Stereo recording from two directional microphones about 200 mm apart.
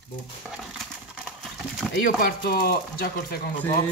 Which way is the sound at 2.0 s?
50° left (ahead or behind).